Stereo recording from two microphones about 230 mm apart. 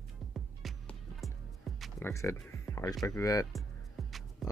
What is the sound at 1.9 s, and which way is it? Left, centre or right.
Speech, centre.